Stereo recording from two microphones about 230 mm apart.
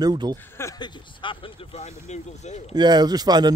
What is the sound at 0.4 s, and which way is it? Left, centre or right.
Speech, centre.